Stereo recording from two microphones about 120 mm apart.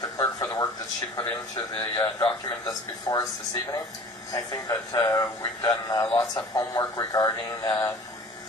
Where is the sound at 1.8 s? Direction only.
25° left (ahead or behind).